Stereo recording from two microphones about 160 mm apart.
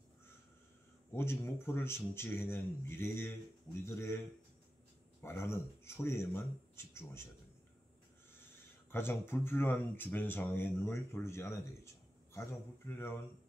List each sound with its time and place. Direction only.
1.1 s speech: 15° left (ahead or behind)
5.2 s speech: 15° left (ahead or behind)
8.9 s speech: 15° left (ahead or behind)